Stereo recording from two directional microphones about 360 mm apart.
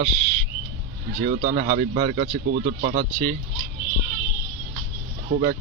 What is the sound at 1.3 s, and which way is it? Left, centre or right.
Speech, right.